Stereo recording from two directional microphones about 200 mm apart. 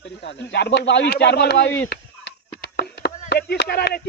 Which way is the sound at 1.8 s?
55° left (ahead or behind).